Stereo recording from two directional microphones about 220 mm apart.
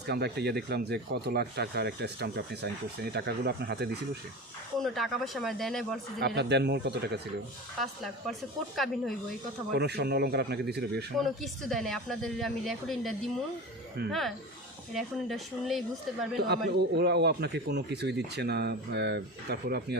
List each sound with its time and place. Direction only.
0.1 s speech: 50° right (ahead or behind)
4.8 s a woman's voice: centre (ahead or behind)
6.1 s speech: 50° right (ahead or behind)
7.8 s a woman's voice: centre (ahead or behind)
9.7 s speech: 50° right (ahead or behind)
11.2 s a woman's voice: centre (ahead or behind)
16.5 s speech: 50° right (ahead or behind)